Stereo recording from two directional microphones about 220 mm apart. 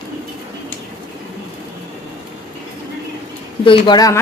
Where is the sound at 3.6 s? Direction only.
20° left (ahead or behind).